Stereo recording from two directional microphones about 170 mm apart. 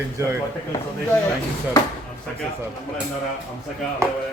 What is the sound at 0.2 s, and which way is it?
Speech, 15° right (ahead or behind).